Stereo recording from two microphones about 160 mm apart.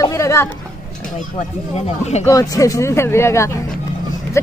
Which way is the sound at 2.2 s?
20° left (ahead or behind).